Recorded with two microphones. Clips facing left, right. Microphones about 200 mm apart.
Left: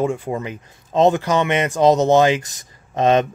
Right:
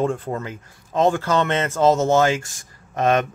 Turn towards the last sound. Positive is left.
turn(degrees=20)  # may be behind; listen again after turning